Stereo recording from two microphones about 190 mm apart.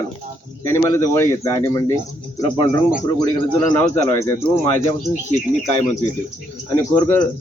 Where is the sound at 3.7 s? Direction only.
15° left (ahead or behind).